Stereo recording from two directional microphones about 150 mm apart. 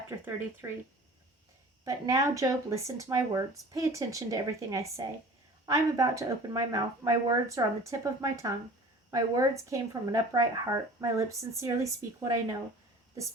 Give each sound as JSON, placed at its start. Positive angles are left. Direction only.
{"t": 0.6, "sound": "speech", "side_deg": -20}
{"t": 1.8, "sound": "speech", "side_deg": -20}